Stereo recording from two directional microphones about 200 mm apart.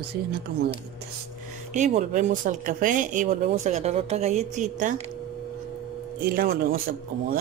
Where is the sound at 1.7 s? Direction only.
40° right (ahead or behind).